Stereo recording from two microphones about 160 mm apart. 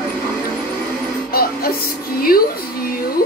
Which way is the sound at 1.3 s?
70° left (ahead or behind).